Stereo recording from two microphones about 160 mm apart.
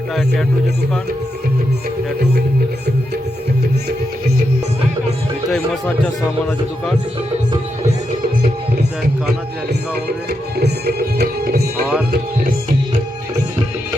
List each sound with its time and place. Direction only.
5.5 s speech: 5° left (ahead or behind)
10.6 s music: 80° right